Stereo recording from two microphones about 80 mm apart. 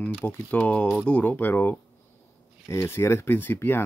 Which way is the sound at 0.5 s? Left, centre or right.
Centre.